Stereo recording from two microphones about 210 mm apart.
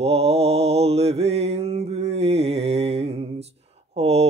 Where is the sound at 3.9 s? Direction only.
30° right (ahead or behind).